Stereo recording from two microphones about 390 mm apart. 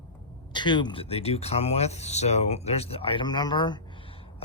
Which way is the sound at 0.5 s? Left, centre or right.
Centre.